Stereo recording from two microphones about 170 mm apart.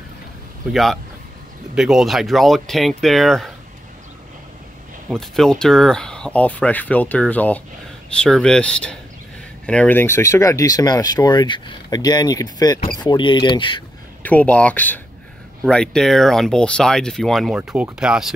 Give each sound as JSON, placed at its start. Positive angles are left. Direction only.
{"t": 1.8, "sound": "speech", "side_deg": 0}
{"t": 5.1, "sound": "speech", "side_deg": 0}
{"t": 14.2, "sound": "speech", "side_deg": 10}